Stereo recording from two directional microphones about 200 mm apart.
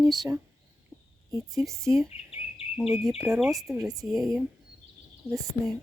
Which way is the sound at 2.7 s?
5° right (ahead or behind).